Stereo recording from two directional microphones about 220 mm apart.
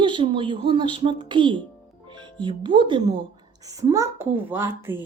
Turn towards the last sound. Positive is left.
turn(degrees=-10)  # may be behind; listen again after turning